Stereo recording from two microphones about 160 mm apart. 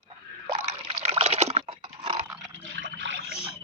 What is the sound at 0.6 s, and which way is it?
Liquid, 40° right (ahead or behind).